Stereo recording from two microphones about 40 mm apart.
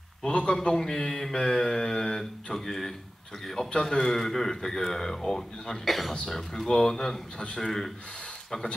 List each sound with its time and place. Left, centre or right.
0.3 s a man's voice: left
0.7 s speech: centre
3.6 s a man's voice: left; by 6.1 s centre
6.2 s speech: centre